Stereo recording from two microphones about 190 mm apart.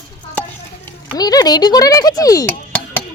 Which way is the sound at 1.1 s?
20° left (ahead or behind).